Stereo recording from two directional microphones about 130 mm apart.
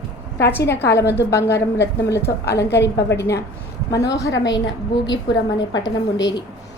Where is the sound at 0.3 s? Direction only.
20° left (ahead or behind).